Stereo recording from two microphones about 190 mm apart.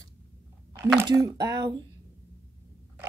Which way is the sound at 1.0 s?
20° right (ahead or behind).